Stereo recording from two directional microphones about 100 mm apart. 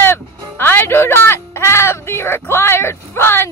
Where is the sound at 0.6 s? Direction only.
20° left (ahead or behind).